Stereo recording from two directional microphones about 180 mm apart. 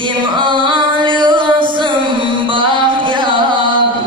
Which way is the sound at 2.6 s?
25° right (ahead or behind).